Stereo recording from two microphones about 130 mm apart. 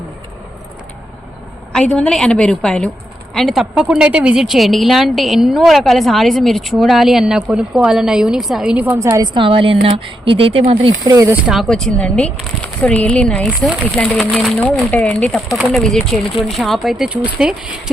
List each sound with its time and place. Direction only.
1.7 s speech: 5° left (ahead or behind)
8.9 s a woman's voice: 25° right (ahead or behind)
9.3 s a woman's voice: 40° right (ahead or behind)
11.0 s a woman's voice: 25° right (ahead or behind)
11.4 s speech: centre (ahead or behind)